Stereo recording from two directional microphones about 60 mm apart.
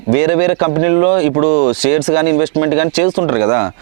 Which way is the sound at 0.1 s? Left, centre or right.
Right.